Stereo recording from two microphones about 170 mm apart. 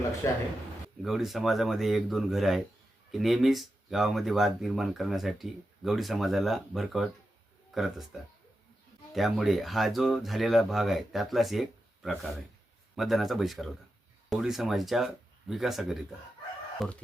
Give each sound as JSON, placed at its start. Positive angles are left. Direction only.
{"t": 0.2, "sound": "a man's voice", "side_deg": 15}
{"t": 1.0, "sound": "speech", "side_deg": 0}